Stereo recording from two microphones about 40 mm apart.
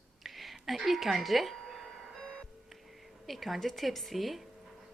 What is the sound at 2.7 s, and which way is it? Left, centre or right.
A woman's voice, centre.